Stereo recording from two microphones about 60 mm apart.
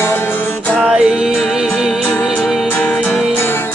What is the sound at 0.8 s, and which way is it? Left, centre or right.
Music, centre.